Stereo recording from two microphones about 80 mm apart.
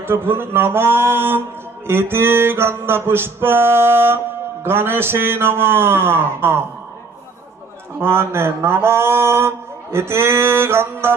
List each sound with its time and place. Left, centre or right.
0.0 s music: right
7.9 s speech: right